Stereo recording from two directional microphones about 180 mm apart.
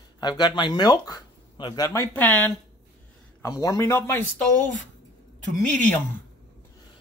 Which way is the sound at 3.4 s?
20° left (ahead or behind).